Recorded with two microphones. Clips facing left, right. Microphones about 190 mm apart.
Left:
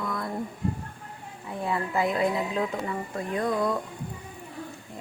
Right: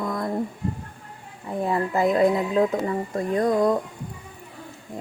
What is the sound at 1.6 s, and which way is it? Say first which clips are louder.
Speech: right 5 dB; 45° right (ahead or behind).